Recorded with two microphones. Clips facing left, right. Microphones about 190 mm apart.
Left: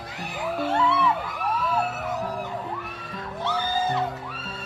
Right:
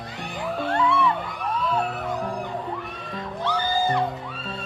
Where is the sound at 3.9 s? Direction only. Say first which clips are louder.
Right 2 dB; 5° left (ahead or behind).